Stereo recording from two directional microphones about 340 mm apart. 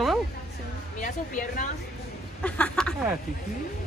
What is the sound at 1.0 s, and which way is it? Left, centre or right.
Speech, left.